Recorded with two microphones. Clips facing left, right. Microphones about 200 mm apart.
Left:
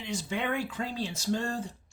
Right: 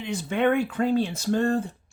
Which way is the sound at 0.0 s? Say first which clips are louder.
Right 9 dB; 55° right (ahead or behind).